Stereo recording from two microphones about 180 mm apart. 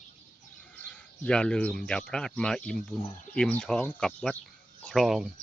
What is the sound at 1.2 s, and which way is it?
Speech, 5° left (ahead or behind).